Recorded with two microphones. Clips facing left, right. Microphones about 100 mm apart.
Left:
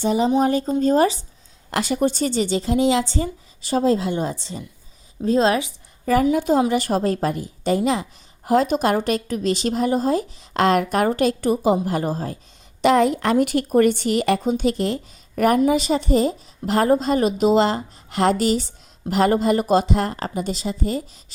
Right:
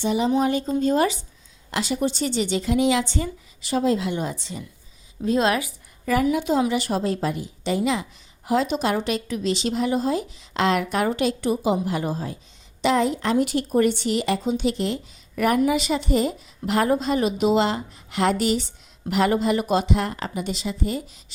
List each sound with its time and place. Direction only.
0.0 s a woman's voice: 40° left (ahead or behind)
1.7 s a woman's voice: 50° left (ahead or behind); by 5.7 s 25° left (ahead or behind)
6.3 s a woman's voice: 40° left (ahead or behind)
12.8 s a woman's voice: 55° left (ahead or behind); by 21.3 s 35° left (ahead or behind)